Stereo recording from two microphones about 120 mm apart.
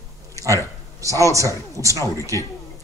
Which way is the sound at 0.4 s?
25° right (ahead or behind).